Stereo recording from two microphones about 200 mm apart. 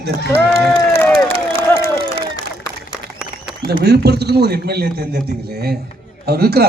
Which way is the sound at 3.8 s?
55° right (ahead or behind).